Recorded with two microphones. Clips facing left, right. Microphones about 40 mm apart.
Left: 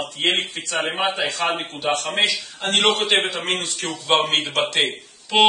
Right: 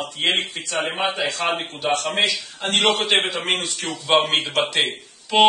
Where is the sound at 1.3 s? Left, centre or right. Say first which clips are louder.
Even; left.